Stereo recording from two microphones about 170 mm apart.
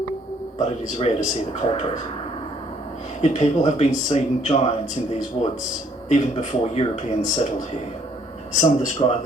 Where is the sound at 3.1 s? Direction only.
40° left (ahead or behind).